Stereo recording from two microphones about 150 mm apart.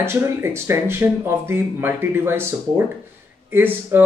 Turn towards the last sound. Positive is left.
turn(degrees=-15)  # may be behind; listen again after turning